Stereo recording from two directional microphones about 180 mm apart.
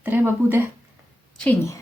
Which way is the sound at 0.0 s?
10° right (ahead or behind).